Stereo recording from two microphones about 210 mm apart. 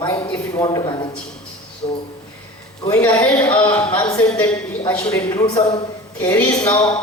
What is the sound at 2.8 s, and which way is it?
A woman's voice, 10° left (ahead or behind).